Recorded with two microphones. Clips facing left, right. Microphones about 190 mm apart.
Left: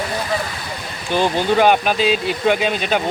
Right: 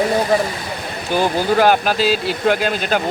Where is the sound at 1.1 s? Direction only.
5° right (ahead or behind).